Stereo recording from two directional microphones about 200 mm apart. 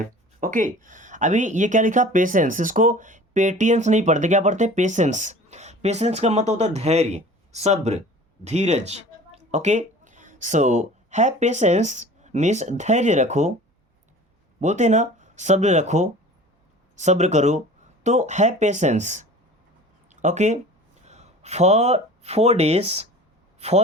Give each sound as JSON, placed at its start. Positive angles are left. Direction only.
{"t": 0.0, "sound": "speech", "side_deg": -40}
{"t": 14.6, "sound": "speech", "side_deg": -35}
{"t": 20.1, "sound": "a sound", "side_deg": -35}
{"t": 21.1, "sound": "a man's voice", "side_deg": -35}